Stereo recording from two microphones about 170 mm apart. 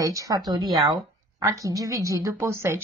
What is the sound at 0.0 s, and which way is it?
A woman's voice, 20° right (ahead or behind).